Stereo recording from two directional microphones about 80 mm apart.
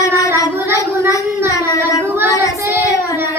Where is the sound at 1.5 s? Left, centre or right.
Left.